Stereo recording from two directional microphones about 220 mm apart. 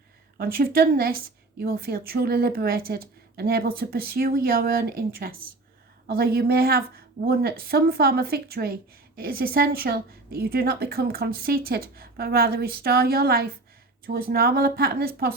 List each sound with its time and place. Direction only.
0.3 s a woman's voice: 40° right (ahead or behind)